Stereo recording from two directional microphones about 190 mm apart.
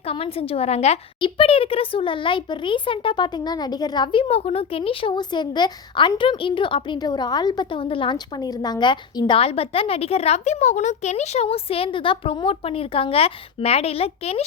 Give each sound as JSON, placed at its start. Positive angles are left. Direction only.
{"t": 0.0, "sound": "a woman's voice", "side_deg": 30}